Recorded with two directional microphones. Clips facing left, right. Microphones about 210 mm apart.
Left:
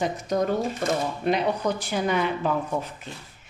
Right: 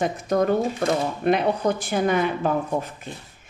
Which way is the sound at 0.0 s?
55° right (ahead or behind).